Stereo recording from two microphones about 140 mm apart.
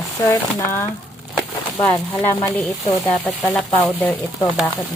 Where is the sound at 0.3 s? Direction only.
15° left (ahead or behind).